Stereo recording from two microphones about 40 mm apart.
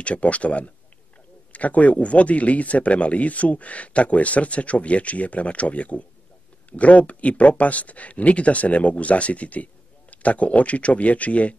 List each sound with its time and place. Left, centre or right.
0.0 s speech: left